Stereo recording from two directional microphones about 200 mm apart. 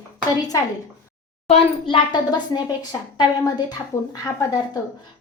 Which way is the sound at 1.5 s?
25° left (ahead or behind).